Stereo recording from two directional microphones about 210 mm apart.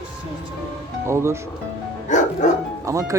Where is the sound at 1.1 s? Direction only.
15° right (ahead or behind).